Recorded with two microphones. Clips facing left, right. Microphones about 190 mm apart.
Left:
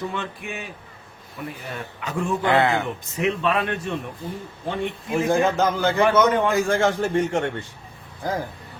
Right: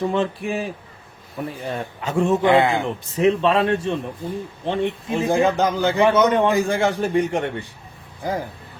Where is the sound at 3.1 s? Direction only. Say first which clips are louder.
Right 6 dB; 35° right (ahead or behind); by 7.7 s 15° right (ahead or behind).